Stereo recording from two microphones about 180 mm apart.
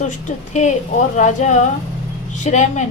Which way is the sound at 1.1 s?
40° left (ahead or behind).